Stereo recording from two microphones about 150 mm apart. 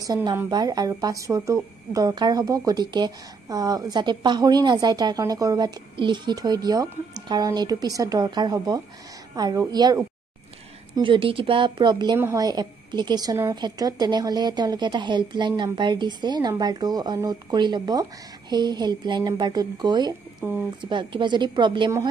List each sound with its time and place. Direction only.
0.0 s a woman's voice: 25° right (ahead or behind)
11.0 s a woman's voice: 35° right (ahead or behind)